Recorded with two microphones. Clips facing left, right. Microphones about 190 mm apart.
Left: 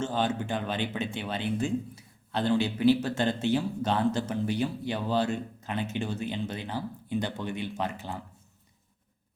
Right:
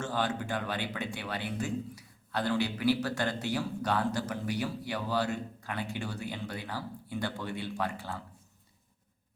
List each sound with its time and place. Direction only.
0.0 s speech: 25° left (ahead or behind)